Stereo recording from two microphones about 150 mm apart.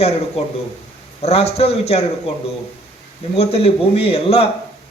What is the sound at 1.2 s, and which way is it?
Speech, 45° left (ahead or behind).